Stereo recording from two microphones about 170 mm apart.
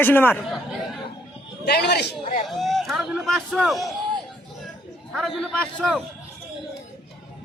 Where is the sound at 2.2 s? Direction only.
45° left (ahead or behind).